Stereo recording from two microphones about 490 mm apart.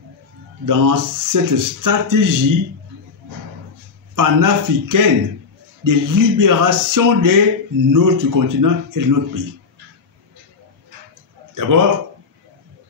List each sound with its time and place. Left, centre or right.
0.7 s speech: right
4.1 s speech: right
11.5 s speech: right